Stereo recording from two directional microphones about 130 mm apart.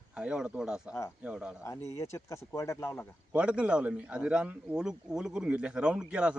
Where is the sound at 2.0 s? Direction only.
20° left (ahead or behind).